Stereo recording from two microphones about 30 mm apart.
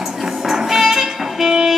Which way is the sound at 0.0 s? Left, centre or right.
Centre.